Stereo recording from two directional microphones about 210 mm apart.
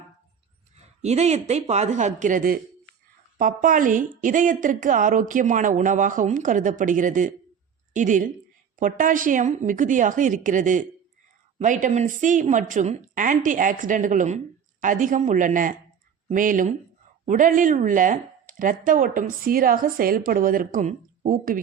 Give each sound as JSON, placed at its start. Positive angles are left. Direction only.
{"t": 0.8, "sound": "speech", "side_deg": -30}